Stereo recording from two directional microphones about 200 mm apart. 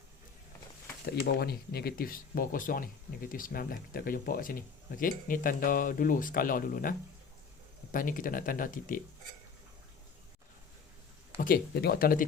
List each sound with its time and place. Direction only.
1.0 s speech: 55° left (ahead or behind)
7.9 s speech: 45° left (ahead or behind)
11.3 s speech: 45° left (ahead or behind)